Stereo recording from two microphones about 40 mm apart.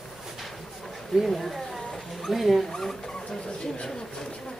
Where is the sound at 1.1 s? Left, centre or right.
Centre.